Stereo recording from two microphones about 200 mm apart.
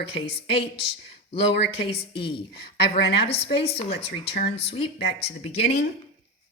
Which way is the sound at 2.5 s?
55° left (ahead or behind).